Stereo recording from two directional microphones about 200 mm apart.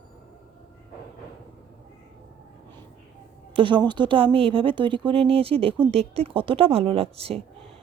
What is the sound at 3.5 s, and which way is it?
A woman's voice, 25° right (ahead or behind).